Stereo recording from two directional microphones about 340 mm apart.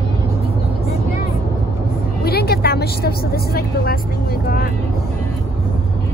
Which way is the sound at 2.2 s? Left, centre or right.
Left.